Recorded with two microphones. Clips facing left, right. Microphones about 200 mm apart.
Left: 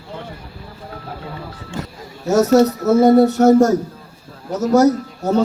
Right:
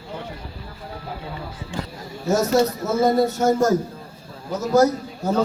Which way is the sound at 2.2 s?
75° left (ahead or behind).